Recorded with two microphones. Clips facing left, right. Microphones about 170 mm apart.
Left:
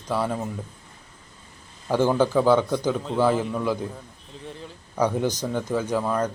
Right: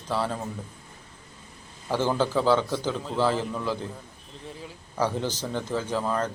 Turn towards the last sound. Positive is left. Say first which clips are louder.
# left 3 dB
turn(degrees=10)  # may be behind; listen again after turning